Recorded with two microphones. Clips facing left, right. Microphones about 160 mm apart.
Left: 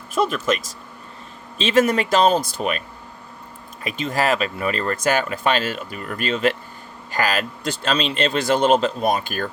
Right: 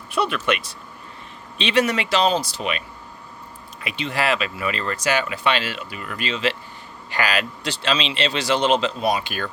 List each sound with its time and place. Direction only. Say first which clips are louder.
0.1 s speech: left 2 dB; 40° left (ahead or behind)
3.8 s speech: left 2 dB; 45° left (ahead or behind)